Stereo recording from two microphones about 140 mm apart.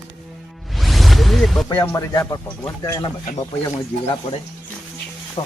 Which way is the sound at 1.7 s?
20° left (ahead or behind).